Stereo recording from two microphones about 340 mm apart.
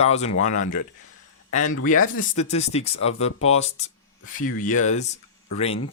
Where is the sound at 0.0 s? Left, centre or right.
Centre.